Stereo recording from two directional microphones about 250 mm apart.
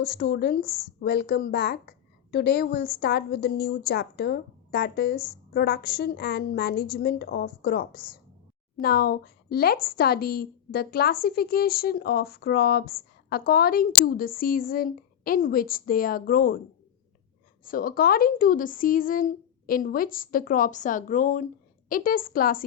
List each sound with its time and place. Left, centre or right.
0.0 s a woman's voice: left
17.6 s a woman's voice: left